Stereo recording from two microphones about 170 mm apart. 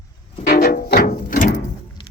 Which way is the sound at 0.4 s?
65° left (ahead or behind).